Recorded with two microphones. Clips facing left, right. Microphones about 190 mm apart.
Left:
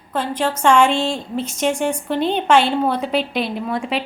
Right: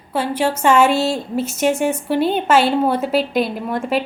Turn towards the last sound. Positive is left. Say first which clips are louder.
# right 2 dB
turn(degrees=0)  # may be behind; listen again after turning